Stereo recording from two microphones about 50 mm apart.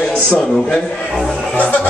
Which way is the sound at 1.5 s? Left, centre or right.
Left.